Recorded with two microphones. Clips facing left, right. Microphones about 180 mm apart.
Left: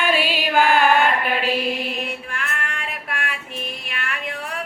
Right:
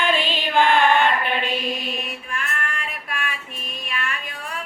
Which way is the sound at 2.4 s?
70° left (ahead or behind).